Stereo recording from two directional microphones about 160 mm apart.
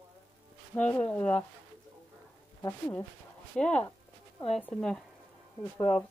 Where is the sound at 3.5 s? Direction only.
10° left (ahead or behind).